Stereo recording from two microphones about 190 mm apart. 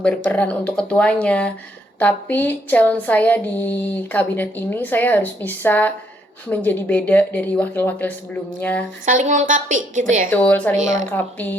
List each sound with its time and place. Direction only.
0.0 s speech: 5° left (ahead or behind)
9.0 s a woman's voice: 40° right (ahead or behind)
10.2 s speech: 10° left (ahead or behind)